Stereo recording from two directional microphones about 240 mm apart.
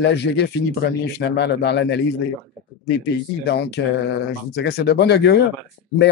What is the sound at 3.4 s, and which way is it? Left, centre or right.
Speech, left.